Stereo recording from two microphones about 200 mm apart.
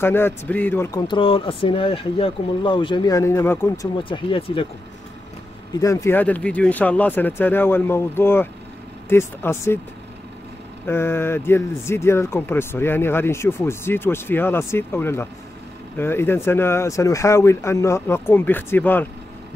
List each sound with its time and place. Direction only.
0.0 s speech: 10° left (ahead or behind)
1.0 s speech: 25° left (ahead or behind)
5.8 s speech: 15° left (ahead or behind)
10.9 s speech: 10° left (ahead or behind)